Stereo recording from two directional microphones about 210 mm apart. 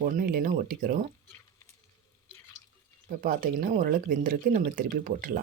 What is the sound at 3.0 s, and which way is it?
Speech, 40° right (ahead or behind).